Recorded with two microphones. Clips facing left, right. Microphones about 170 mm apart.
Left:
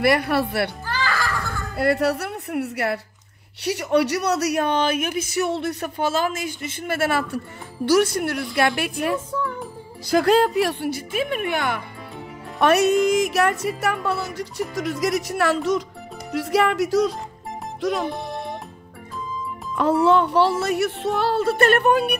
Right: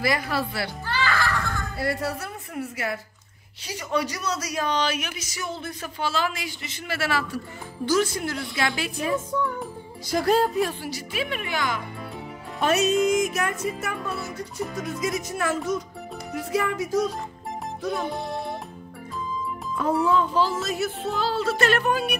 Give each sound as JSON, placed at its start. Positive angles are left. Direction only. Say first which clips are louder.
{"t": 0.0, "sound": "a woman's voice", "louder": "left 6 dB", "side_deg": 65}
{"t": 1.0, "sound": "music", "louder": "even", "side_deg": 10}
{"t": 1.8, "sound": "a woman's voice", "louder": "left 9 dB", "side_deg": 65}
{"t": 7.8, "sound": "a woman's voice", "louder": "left 5 dB", "side_deg": 65}
{"t": 10.1, "sound": "a woman's voice", "louder": "left 4 dB", "side_deg": 75}
{"t": 18.0, "sound": "speech", "louder": "left 1 dB", "side_deg": 0}
{"t": 19.7, "sound": "speech", "louder": "left 5 dB", "side_deg": 75}